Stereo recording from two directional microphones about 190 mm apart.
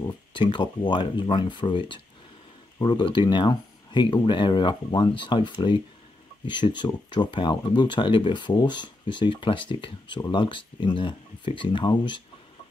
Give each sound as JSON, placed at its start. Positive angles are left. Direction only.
{"t": 0.0, "sound": "speech", "side_deg": 25}